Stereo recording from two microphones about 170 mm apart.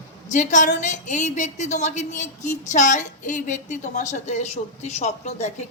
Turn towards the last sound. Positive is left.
turn(degrees=40)  # may be behind; listen again after turning